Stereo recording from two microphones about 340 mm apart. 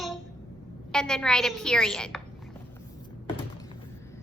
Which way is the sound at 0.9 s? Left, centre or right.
Centre.